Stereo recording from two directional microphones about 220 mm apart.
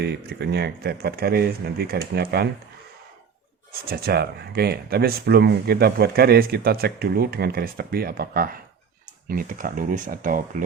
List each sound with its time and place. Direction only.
0.0 s speech: 45° right (ahead or behind)
3.7 s speech: 45° right (ahead or behind)